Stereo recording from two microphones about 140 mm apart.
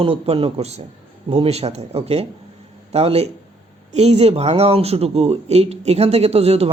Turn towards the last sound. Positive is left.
turn(degrees=-45)  # may be behind; listen again after turning